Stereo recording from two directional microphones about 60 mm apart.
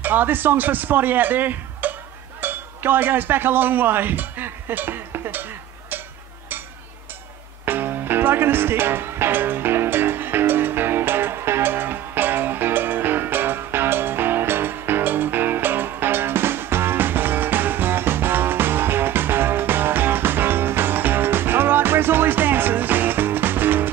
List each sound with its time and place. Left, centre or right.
0.0 s speech: right
2.4 s music: right
7.6 s music: right